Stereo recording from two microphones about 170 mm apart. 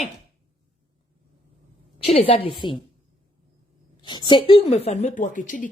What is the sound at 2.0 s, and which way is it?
Speech, 35° left (ahead or behind).